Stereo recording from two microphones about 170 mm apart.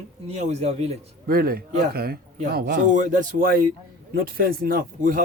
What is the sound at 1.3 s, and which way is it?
Speech, 60° right (ahead or behind).